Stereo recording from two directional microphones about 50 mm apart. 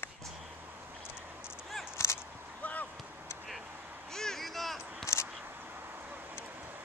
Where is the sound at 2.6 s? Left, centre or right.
Left.